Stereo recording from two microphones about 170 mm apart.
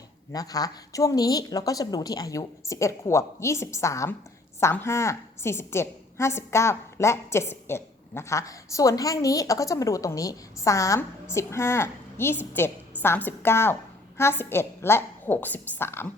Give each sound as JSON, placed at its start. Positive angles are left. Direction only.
{"t": 0.3, "sound": "a woman's voice", "side_deg": 20}